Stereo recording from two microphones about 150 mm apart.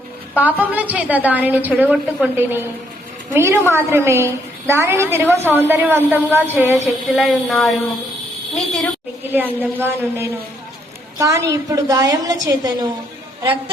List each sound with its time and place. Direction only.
0.3 s a woman's voice: 10° right (ahead or behind)
6.8 s a woman's voice: centre (ahead or behind)
9.3 s a woman's voice: 15° right (ahead or behind)